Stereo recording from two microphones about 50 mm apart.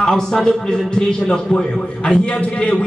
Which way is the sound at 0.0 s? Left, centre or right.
Centre.